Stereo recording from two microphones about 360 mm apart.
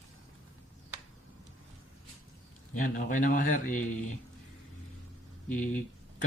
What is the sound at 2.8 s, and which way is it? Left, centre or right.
Speech, left.